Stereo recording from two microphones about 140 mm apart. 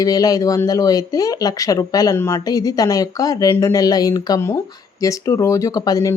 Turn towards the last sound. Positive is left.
turn(degrees=25)  # may be behind; listen again after turning